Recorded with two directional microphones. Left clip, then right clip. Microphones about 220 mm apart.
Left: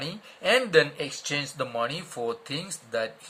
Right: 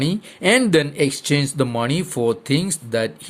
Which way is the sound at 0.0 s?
40° right (ahead or behind).